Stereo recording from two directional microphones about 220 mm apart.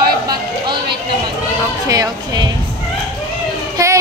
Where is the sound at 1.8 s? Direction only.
15° right (ahead or behind).